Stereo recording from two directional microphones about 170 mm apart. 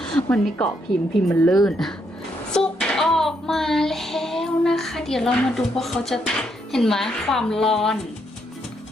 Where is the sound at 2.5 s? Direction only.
5° left (ahead or behind).